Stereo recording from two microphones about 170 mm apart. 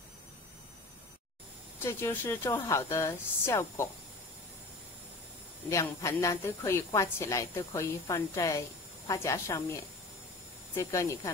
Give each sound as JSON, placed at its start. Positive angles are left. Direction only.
{"t": 1.8, "sound": "a woman's voice", "side_deg": 15}
{"t": 5.7, "sound": "a woman's voice", "side_deg": 15}
{"t": 10.8, "sound": "a woman's voice", "side_deg": 15}